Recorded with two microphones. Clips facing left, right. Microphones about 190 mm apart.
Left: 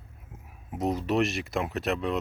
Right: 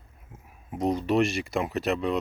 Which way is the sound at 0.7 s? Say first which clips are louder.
Right 2 dB; centre (ahead or behind).